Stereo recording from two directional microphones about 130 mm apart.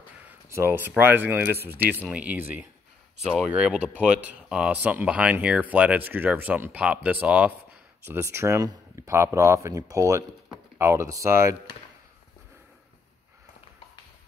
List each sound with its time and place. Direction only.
0.5 s speech: 20° right (ahead or behind)